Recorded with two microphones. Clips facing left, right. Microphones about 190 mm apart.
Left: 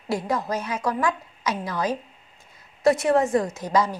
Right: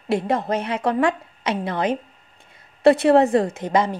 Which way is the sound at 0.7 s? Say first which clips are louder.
Right 4 dB; 60° right (ahead or behind).